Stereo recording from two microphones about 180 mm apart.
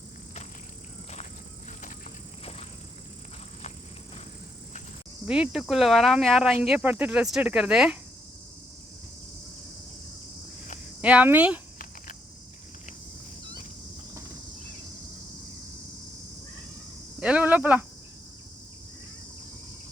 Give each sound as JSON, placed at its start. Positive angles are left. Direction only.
{"t": 2.4, "sound": "vehicle", "side_deg": 35}
{"t": 5.2, "sound": "speech", "side_deg": -5}
{"t": 11.0, "sound": "speech", "side_deg": -10}
{"t": 17.2, "sound": "a sound", "side_deg": -5}